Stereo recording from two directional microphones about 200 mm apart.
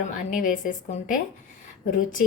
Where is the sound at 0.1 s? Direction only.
40° left (ahead or behind).